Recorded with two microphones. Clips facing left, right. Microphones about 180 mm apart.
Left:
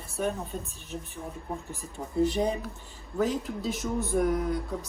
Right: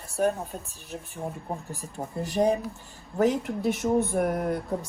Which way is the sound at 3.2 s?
65° right (ahead or behind).